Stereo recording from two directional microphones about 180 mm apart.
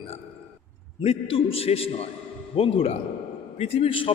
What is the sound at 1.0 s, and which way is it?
A man's voice, 30° left (ahead or behind).